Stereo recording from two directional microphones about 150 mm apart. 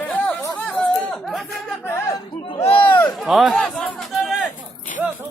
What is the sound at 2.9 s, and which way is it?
Speech, 10° left (ahead or behind).